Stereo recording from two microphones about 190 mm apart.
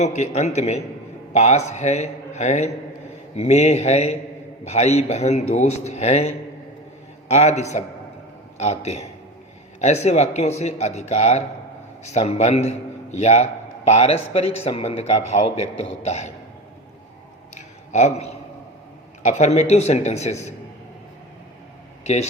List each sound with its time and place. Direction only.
0.0 s speech: 35° left (ahead or behind)
17.9 s a man's voice: 35° left (ahead or behind)
22.0 s speech: 35° left (ahead or behind)